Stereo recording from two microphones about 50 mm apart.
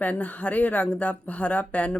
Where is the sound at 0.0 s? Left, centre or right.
Left.